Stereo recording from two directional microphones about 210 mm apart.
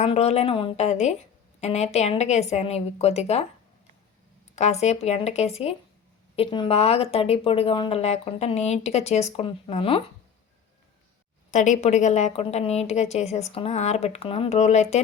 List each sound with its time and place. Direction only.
0.0 s a woman's voice: 30° left (ahead or behind)
4.5 s a woman's voice: 30° left (ahead or behind)
11.5 s a woman's voice: 35° left (ahead or behind)